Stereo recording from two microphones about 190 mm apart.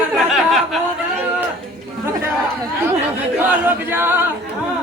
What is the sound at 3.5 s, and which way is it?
A capella, 10° right (ahead or behind).